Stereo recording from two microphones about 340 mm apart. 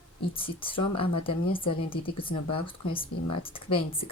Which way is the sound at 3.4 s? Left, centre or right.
Centre.